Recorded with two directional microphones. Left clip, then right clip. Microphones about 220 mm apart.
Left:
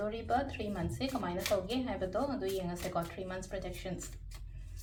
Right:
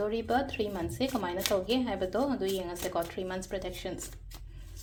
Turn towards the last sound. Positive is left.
turn(degrees=-50)  # may be behind; listen again after turning